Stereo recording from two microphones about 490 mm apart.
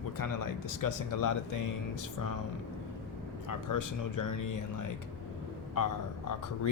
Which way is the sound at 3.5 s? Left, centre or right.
Left.